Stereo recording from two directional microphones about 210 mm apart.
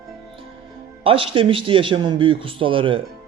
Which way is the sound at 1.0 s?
25° right (ahead or behind).